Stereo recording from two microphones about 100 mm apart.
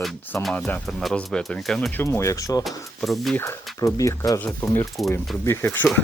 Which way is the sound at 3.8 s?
30° left (ahead or behind).